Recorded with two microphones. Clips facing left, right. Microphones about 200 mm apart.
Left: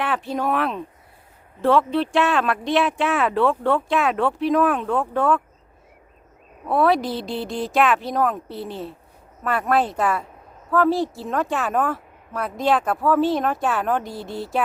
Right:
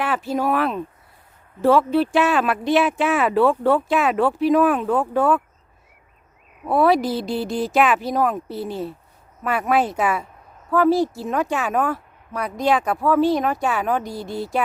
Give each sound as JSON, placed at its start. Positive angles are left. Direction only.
{"t": 0.0, "sound": "speech", "side_deg": 0}
{"t": 6.7, "sound": "speech", "side_deg": 0}